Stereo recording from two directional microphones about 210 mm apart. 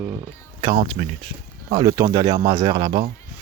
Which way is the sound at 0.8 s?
30° right (ahead or behind).